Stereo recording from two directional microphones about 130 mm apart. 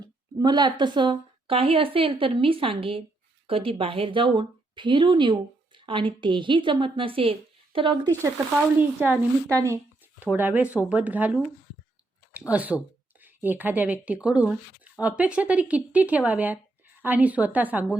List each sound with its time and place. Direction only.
0.0 s a woman's voice: 30° right (ahead or behind)
8.8 s speech: 15° right (ahead or behind)
12.5 s speech: 10° right (ahead or behind)